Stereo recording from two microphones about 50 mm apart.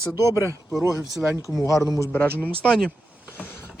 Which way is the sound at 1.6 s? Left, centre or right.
Left.